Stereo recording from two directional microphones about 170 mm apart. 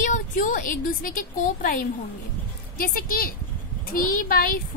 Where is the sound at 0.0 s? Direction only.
50° left (ahead or behind).